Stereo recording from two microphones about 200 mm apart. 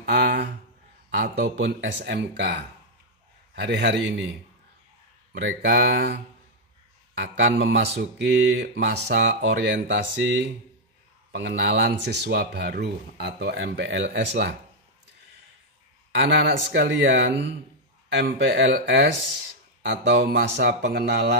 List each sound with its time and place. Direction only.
0.0 s a sound: 55° right (ahead or behind)
1.1 s speech: 50° right (ahead or behind)
5.4 s speech: 60° right (ahead or behind)
16.1 s speech: 60° right (ahead or behind)